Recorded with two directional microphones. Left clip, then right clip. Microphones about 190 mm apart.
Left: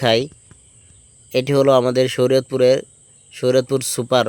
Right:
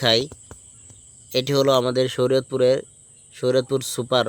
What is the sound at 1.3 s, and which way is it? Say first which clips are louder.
Speech: left 4 dB; 20° left (ahead or behind).